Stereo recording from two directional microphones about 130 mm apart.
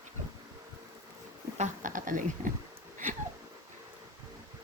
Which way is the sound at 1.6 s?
85° right.